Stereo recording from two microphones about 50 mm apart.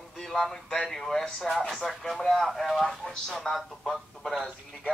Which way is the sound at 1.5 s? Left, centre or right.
Centre.